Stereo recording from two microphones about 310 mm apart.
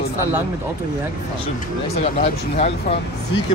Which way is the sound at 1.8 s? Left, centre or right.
Left.